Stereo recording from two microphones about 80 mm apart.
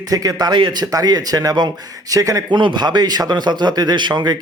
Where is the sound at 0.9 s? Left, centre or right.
Right.